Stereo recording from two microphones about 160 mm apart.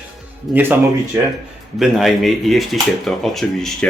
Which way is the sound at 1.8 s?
Centre (ahead or behind).